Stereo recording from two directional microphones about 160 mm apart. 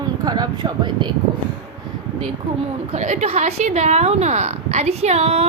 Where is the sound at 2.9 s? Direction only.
45° right (ahead or behind).